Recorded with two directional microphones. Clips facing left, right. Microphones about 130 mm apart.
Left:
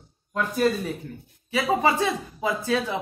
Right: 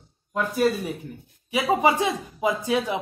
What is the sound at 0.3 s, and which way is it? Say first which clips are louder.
Speech: right 1 dB; 5° right (ahead or behind).